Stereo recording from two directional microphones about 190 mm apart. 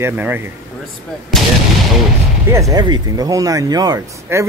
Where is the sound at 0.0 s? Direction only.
10° right (ahead or behind).